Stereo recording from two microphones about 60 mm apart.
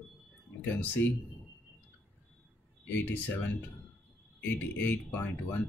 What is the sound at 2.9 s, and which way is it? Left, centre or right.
Speech, left.